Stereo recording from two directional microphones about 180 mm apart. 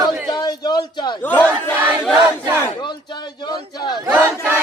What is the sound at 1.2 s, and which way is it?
Battle cry, 10° left (ahead or behind).